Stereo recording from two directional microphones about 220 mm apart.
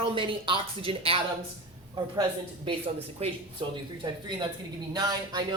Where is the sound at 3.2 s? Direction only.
20° right (ahead or behind).